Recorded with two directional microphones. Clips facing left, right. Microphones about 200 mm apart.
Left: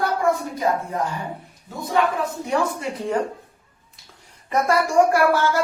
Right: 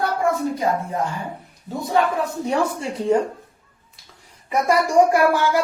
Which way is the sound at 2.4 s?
25° right (ahead or behind).